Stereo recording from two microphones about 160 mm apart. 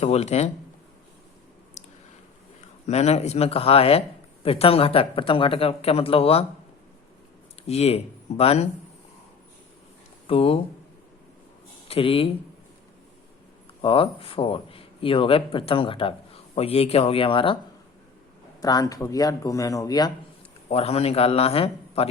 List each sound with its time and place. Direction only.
0.0 s speech: 40° left (ahead or behind)
1.8 s a sound: 45° left (ahead or behind)
2.6 s speech: 45° left (ahead or behind)
7.7 s speech: 40° left (ahead or behind)
10.2 s speech: 35° left (ahead or behind)
11.9 s speech: 35° left (ahead or behind)
13.8 s speech: 35° left (ahead or behind)
18.6 s a man's voice: 25° left (ahead or behind)
20.7 s speech: 40° left (ahead or behind)